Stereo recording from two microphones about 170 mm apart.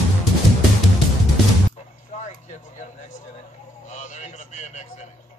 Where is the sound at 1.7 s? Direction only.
45° left (ahead or behind).